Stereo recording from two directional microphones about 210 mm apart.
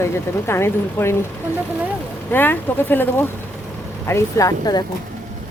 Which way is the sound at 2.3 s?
10° left (ahead or behind).